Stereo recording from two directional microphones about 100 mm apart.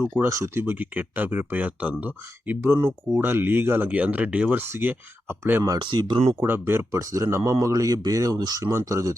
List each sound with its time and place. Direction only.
0.0 s speech: 25° right (ahead or behind)
0.6 s speech: 15° right (ahead or behind)
5.8 s speech: 50° right (ahead or behind)
6.4 s speech: 20° right (ahead or behind)
7.0 s speech: 35° right (ahead or behind)